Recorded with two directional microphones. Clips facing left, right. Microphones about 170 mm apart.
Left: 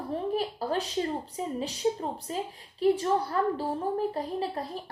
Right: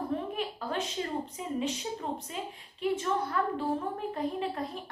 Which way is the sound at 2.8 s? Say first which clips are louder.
Left 5 dB; 35° left (ahead or behind).